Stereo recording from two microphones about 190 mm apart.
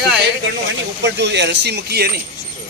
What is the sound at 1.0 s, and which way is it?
Speech, 65° right (ahead or behind).